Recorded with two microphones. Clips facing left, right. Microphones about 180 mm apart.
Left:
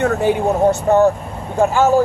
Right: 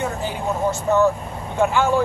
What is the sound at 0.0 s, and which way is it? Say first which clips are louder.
Speech: left 9 dB; 60° left (ahead or behind).